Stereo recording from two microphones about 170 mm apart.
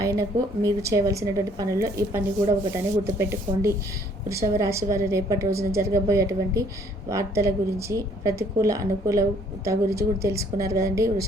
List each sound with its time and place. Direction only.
0.0 s a woman's voice: 20° right (ahead or behind)